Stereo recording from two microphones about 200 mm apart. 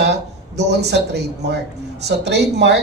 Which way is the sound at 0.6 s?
55° right (ahead or behind).